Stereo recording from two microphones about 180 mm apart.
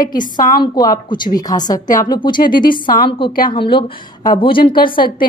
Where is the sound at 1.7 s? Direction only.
50° left (ahead or behind).